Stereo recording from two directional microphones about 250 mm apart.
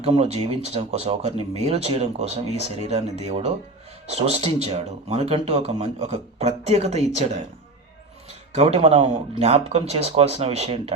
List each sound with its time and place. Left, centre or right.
0.0 s speech: right
8.5 s speech: right